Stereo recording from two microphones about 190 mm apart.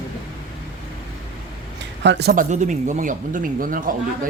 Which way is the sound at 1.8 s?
65° right (ahead or behind).